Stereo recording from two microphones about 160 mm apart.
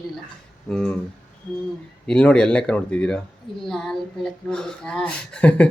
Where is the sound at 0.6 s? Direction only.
5° left (ahead or behind).